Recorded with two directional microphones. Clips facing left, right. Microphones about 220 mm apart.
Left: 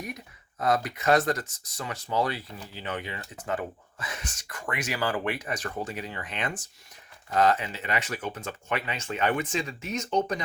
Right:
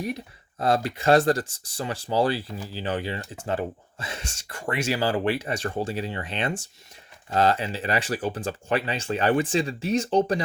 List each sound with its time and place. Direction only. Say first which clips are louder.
0.6 s speech: right 3 dB; 30° right (ahead or behind)